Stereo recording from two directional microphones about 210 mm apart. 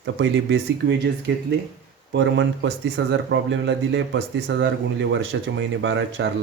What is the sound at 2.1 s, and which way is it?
Speech, 60° right (ahead or behind).